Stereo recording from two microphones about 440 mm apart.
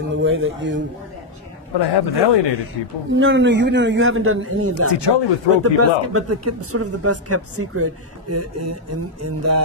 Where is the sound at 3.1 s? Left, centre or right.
Right.